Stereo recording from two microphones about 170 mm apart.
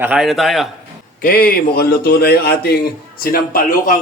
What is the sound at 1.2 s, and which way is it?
A man's voice, 60° left (ahead or behind).